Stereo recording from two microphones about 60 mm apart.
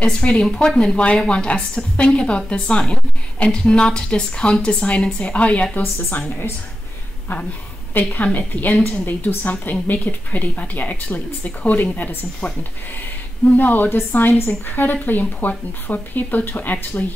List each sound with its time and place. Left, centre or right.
0.0 s a woman's voice: centre
5.8 s speech: left
8.1 s a woman's voice: left
13.6 s speech: left